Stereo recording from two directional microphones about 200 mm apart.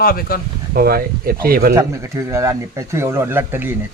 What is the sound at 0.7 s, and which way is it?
Speech, 50° right (ahead or behind).